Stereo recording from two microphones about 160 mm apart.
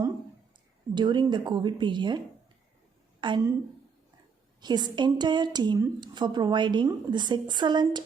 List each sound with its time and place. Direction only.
0.9 s a woman's voice: 30° right (ahead or behind)
4.6 s a woman's voice: 25° right (ahead or behind)